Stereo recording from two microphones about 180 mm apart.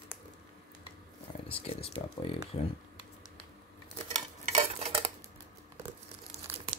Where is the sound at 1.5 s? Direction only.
30° left (ahead or behind).